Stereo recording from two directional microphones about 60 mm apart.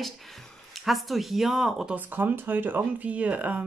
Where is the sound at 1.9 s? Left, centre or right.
Right.